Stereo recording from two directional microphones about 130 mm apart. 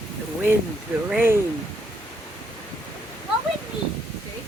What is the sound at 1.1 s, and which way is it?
Speech, 15° right (ahead or behind).